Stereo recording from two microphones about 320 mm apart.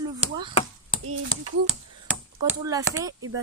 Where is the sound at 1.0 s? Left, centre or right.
Right.